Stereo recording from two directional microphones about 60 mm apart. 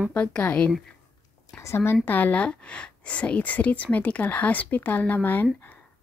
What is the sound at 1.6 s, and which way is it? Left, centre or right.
Speech, left.